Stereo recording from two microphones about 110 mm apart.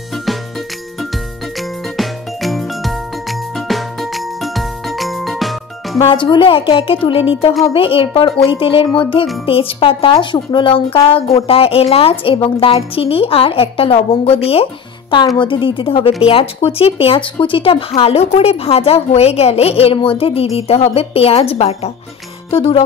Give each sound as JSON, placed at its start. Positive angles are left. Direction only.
{"t": 0.1, "sound": "music", "side_deg": 0}
{"t": 1.6, "sound": "jingle", "side_deg": 0}
{"t": 6.2, "sound": "a woman's voice", "side_deg": 50}
{"t": 15.1, "sound": "a woman's voice", "side_deg": 45}
{"t": 22.5, "sound": "speech", "side_deg": 55}